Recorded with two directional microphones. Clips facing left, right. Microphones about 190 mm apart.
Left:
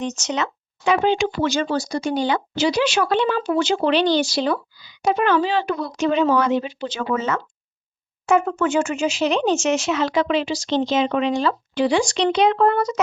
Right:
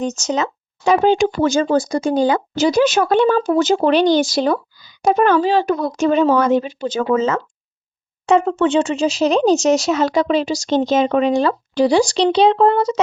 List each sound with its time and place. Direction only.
0.0 s speech: 40° right (ahead or behind)
8.3 s speech: 30° right (ahead or behind)